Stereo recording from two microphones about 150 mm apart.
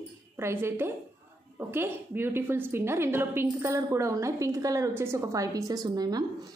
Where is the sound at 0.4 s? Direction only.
15° right (ahead or behind).